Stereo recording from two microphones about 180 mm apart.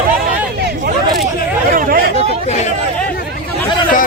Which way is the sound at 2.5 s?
40° left (ahead or behind).